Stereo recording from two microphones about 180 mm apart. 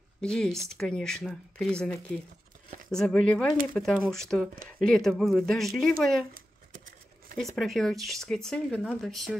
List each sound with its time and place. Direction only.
0.2 s speech: 5° left (ahead or behind)
7.5 s speech: centre (ahead or behind)